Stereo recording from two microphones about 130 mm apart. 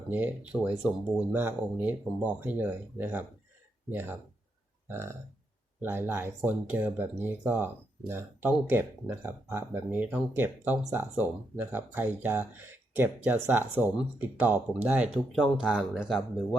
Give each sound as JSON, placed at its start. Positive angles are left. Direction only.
{"t": 0.1, "sound": "speech", "side_deg": -15}
{"t": 4.9, "sound": "burping", "side_deg": -20}
{"t": 5.8, "sound": "speech", "side_deg": -15}